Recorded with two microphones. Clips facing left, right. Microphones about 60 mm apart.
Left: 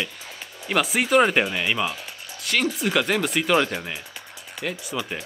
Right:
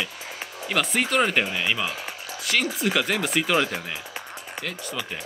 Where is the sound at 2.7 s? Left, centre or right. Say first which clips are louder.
Left 2 dB; centre.